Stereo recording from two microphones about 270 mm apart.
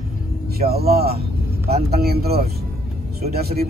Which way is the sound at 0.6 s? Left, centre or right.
Right.